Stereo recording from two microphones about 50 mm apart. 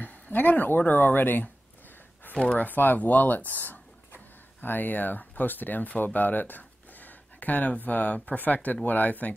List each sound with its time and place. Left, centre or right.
0.0 s speech: left
2.3 s speech: left
2.6 s speech: left